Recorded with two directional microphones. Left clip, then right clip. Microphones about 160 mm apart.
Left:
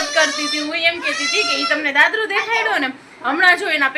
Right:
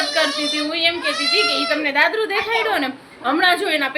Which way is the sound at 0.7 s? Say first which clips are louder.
Left 3 dB; 15° right (ahead or behind).